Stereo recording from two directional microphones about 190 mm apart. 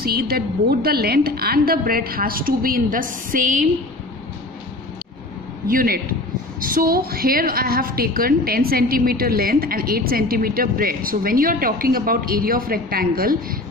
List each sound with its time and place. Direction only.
0.0 s a woman's voice: 55° right (ahead or behind)
5.7 s a woman's voice: 50° right (ahead or behind)